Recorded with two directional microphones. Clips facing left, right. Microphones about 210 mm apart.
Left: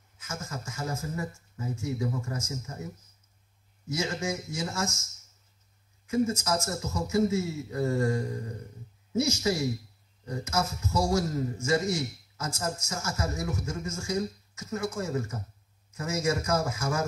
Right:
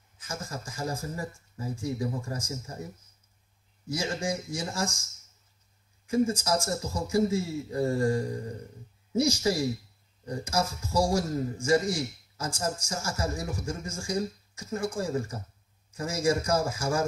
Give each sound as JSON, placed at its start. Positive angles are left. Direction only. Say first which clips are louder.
{"t": 0.2, "sound": "a man's voice", "louder": "right 1 dB", "side_deg": -35}
{"t": 6.0, "sound": "a man's voice", "louder": "right 1 dB", "side_deg": -30}